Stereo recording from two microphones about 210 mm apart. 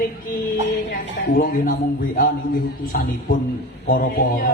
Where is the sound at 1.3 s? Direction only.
45° left (ahead or behind).